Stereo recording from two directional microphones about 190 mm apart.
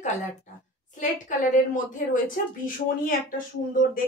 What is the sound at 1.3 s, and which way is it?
Speech, 45° left (ahead or behind).